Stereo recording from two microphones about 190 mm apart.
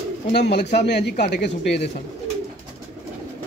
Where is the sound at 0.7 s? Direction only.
60° left (ahead or behind).